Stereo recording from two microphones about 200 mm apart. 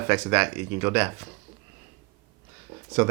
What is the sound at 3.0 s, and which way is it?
Speech, 10° right (ahead or behind).